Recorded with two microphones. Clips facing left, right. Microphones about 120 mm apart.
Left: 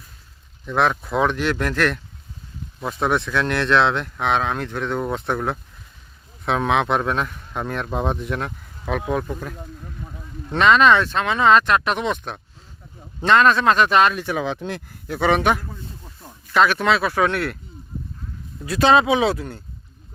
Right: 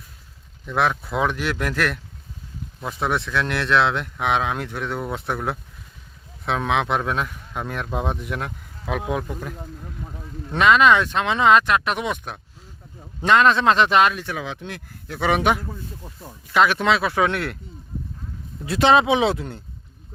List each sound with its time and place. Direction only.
0.6 s speech: 5° right (ahead or behind); by 14.0 s 20° right (ahead or behind)
14.3 s speech: 35° left (ahead or behind)
15.0 s a man's voice: 5° left (ahead or behind)
15.3 s speech: 15° right (ahead or behind)
18.6 s speech: 20° right (ahead or behind)